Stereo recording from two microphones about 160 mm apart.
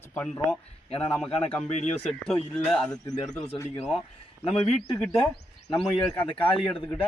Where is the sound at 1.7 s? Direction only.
45° left (ahead or behind).